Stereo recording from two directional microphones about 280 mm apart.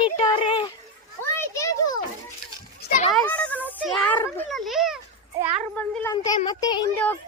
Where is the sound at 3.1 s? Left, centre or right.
Centre.